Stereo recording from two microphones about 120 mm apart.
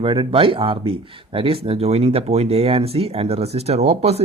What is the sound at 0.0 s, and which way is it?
Speech, 50° right (ahead or behind).